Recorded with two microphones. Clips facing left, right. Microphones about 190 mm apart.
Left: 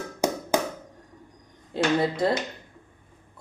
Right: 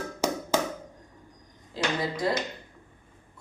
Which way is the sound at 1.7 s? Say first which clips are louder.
Left 5 dB; 60° left (ahead or behind).